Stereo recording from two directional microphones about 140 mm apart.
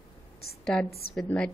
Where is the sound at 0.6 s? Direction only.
5° left (ahead or behind).